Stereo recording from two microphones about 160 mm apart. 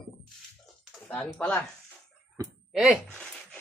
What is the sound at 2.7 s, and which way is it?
Speech, 5° right (ahead or behind).